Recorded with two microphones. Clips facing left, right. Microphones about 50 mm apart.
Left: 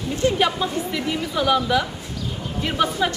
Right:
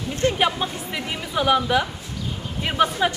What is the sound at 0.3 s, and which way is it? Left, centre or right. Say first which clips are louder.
A woman's voice: left 1 dB; centre.